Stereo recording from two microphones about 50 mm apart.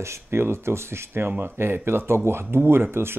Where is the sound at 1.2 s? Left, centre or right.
Right.